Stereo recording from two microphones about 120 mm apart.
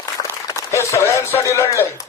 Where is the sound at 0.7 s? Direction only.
25° left (ahead or behind).